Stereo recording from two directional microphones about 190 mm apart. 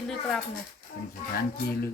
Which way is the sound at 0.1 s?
Centre (ahead or behind).